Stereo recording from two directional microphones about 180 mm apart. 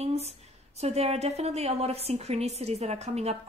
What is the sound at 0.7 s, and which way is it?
A woman's voice, 35° right (ahead or behind).